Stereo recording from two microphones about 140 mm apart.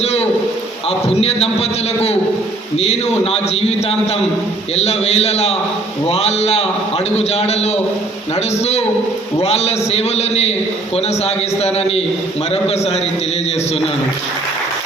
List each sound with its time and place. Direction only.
0.0 s a man's voice: 50° left (ahead or behind)